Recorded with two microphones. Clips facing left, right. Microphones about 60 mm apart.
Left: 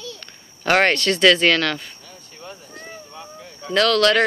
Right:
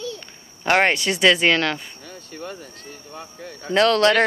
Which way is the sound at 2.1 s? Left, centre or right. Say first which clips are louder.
Right 5 dB; right.